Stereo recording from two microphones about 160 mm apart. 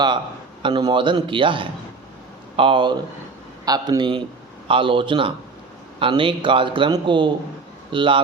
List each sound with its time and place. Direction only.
0.6 s a man's voice: 25° right (ahead or behind)